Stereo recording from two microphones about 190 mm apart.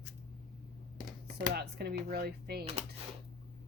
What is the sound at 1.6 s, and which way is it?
Speech, 60° right (ahead or behind).